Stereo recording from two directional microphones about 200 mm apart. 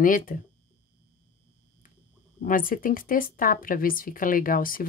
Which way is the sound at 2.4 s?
45° left (ahead or behind).